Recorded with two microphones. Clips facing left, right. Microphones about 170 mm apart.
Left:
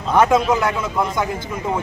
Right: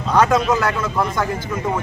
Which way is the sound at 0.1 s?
20° left (ahead or behind).